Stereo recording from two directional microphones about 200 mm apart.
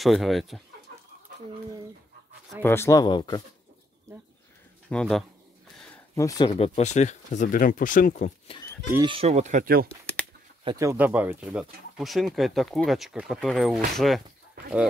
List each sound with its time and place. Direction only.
0.0 s speech: centre (ahead or behind)
2.6 s speech: 10° left (ahead or behind)
4.1 s speech: 15° right (ahead or behind)
4.8 s speech: 5° left (ahead or behind)
6.1 s speech: 20° left (ahead or behind)
6.5 s speech: 30° left (ahead or behind)
9.0 s speech: 30° right (ahead or behind); by 9.8 s 45° right (ahead or behind)
10.6 s speech: 20° right (ahead or behind); by 14.2 s centre (ahead or behind)